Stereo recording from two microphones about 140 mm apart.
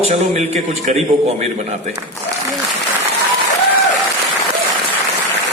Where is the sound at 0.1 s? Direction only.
55° right (ahead or behind).